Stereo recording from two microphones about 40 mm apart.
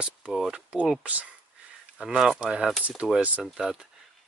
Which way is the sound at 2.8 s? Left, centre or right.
Right.